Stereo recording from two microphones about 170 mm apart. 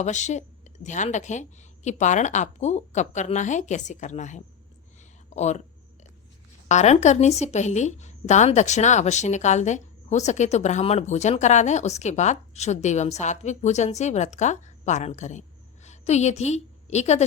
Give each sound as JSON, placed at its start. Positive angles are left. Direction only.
{"t": 0.0, "sound": "a woman's voice", "side_deg": 45}
{"t": 6.7, "sound": "a woman's voice", "side_deg": 40}